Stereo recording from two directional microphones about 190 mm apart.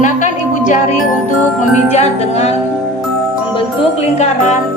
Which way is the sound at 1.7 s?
35° left (ahead or behind).